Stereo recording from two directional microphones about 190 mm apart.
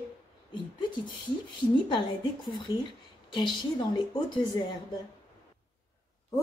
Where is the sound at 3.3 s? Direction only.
25° left (ahead or behind).